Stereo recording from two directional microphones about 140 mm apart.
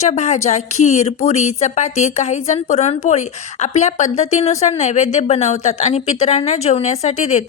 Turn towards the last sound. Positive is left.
turn(degrees=55)  # may be behind; listen again after turning